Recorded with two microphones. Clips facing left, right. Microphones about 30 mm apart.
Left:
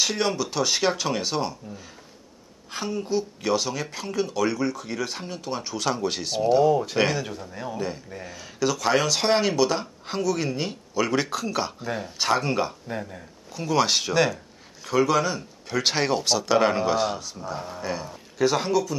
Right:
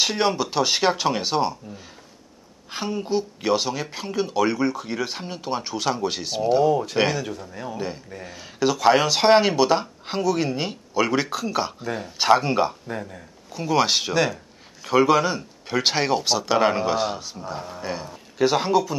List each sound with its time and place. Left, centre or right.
0.0 s a woman's voice: centre
2.7 s a woman's voice: centre
7.7 s a woman's voice: centre
12.2 s a woman's voice: centre
12.9 s a woman's voice: centre